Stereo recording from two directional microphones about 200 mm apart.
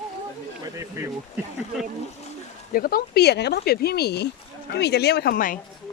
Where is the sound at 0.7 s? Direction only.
15° right (ahead or behind).